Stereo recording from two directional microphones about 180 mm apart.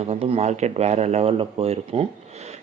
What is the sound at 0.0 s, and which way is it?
Speech, 35° right (ahead or behind).